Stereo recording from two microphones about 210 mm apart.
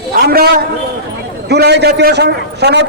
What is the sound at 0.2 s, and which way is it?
A man's voice, 45° right (ahead or behind).